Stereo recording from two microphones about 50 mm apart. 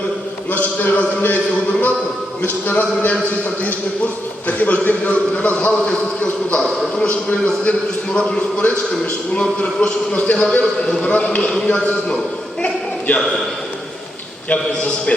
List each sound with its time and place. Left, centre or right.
0.5 s a sound: left
2.4 s a sound: left
3.6 s a man's voice: left
6.6 s a man's voice: centre
7.0 s a man's voice: left
10.8 s a man's voice: centre
11.0 s a man's voice: left
12.6 s a sound: left
14.5 s a man's voice: left